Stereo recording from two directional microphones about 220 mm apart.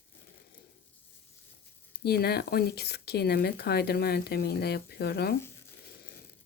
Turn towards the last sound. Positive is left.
turn(degrees=45)  # may be behind; listen again after turning